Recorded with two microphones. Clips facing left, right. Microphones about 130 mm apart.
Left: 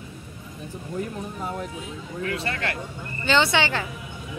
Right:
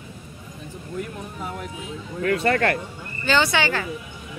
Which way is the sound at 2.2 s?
55° right (ahead or behind).